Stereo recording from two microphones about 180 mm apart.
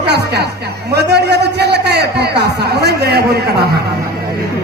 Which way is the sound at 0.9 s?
65° right (ahead or behind).